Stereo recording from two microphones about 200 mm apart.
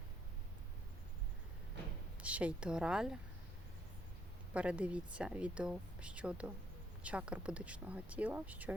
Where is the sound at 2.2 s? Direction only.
5° right (ahead or behind).